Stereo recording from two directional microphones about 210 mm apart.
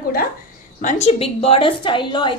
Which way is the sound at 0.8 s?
35° left (ahead or behind).